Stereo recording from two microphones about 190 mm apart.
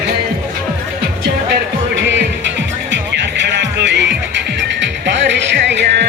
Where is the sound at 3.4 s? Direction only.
65° right (ahead or behind).